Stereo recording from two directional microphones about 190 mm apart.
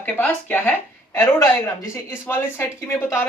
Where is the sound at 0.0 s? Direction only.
5° left (ahead or behind).